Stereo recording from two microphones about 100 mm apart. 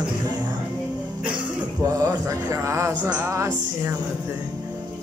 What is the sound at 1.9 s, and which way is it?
Speech, 35° right (ahead or behind).